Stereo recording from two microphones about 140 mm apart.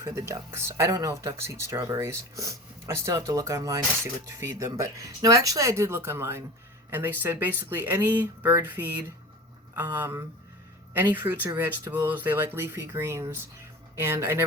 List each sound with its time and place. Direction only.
0.0 s speech: 20° right (ahead or behind)